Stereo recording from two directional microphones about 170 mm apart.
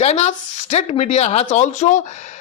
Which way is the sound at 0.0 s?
40° left (ahead or behind).